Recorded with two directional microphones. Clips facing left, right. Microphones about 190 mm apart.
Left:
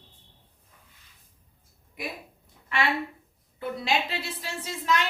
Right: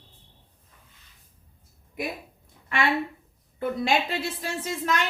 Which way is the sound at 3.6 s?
50° right (ahead or behind).